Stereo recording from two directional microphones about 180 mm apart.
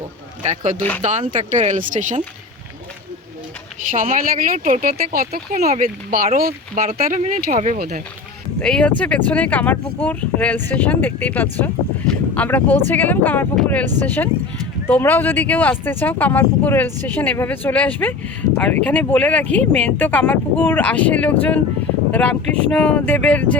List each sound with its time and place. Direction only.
0.8 s speech: 10° left (ahead or behind)
1.0 s speech: 45° right (ahead or behind)
3.9 s speech: 50° right (ahead or behind)
8.5 s speech: 5° left (ahead or behind)